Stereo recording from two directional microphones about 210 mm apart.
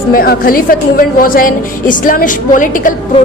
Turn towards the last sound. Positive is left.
turn(degrees=40)  # may be behind; listen again after turning